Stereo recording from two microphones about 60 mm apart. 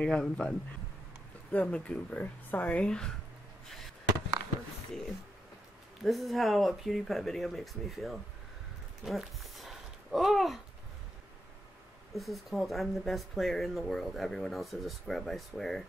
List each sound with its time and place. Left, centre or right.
0.0 s speech: centre
1.5 s speech: left
2.8 s speech: centre
3.7 s a sound: centre
6.0 s speech: centre
9.0 s a sound: centre
12.1 s speech: centre